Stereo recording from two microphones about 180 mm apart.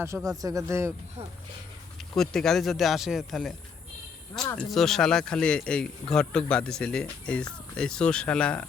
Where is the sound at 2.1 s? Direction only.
Centre (ahead or behind).